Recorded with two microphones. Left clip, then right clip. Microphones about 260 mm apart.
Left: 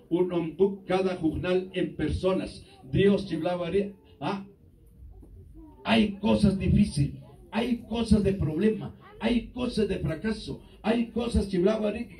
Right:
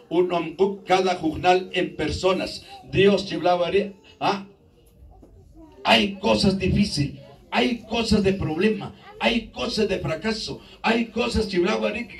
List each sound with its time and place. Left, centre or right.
0.1 s a man's voice: right
5.8 s a man's voice: right